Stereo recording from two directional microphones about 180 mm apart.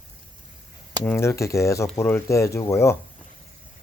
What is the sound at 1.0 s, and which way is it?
Speech, 10° left (ahead or behind).